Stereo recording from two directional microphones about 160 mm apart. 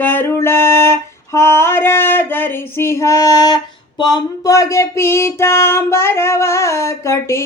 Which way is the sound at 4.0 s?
25° left (ahead or behind).